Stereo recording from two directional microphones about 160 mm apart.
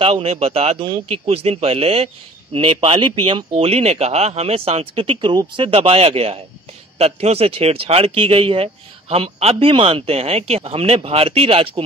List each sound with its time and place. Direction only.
0.0 s speech: 40° right (ahead or behind)